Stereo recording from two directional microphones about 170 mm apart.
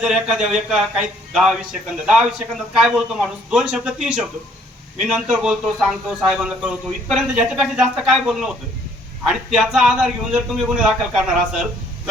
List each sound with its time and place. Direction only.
0.0 s a man's voice: 5° right (ahead or behind)